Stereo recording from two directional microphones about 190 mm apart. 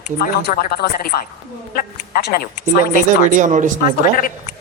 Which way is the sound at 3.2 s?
40° right (ahead or behind).